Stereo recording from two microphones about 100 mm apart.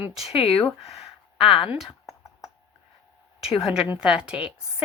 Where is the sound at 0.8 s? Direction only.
85° left; by 1.7 s 65° left (ahead or behind).